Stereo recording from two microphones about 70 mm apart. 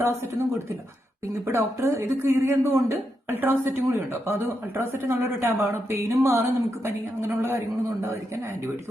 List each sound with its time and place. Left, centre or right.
0.0 s speech: right
1.5 s speech: right